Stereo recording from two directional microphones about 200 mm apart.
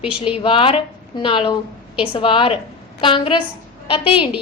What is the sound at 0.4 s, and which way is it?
A woman's voice, 25° left (ahead or behind).